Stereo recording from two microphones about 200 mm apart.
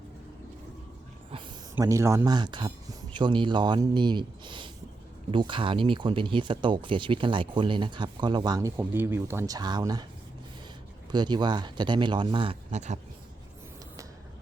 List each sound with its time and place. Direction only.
1.7 s speech: 15° right (ahead or behind)
11.1 s speech: 20° right (ahead or behind)